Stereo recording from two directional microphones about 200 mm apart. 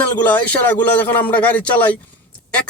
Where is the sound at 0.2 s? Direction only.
10° left (ahead or behind).